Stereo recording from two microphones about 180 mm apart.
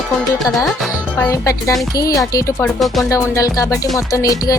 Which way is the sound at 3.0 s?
20° left (ahead or behind).